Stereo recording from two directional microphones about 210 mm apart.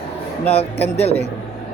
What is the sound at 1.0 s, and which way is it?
Speech, 30° left (ahead or behind).